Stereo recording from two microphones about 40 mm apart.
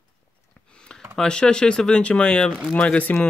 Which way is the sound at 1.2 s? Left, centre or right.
Left.